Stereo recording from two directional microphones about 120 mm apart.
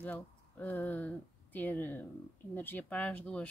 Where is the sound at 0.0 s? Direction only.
15° left (ahead or behind).